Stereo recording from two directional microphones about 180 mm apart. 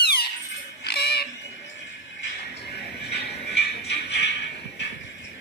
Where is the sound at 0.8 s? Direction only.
60° left (ahead or behind).